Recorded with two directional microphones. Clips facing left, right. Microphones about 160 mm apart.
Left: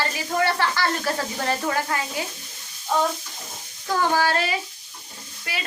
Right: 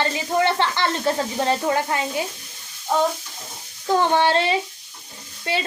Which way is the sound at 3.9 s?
25° right (ahead or behind).